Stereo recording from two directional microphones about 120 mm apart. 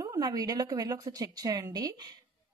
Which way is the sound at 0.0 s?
30° right (ahead or behind).